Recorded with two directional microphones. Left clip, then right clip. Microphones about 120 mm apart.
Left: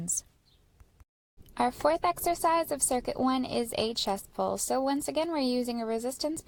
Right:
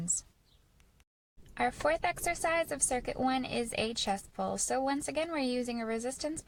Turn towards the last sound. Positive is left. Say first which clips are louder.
# left 3 dB
turn(degrees=30)  # may be behind; listen again after turning